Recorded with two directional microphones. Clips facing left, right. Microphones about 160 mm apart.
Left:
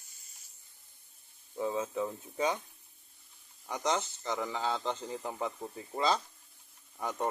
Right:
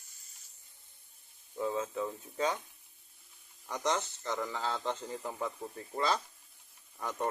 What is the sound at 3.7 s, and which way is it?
Speech, 5° left (ahead or behind).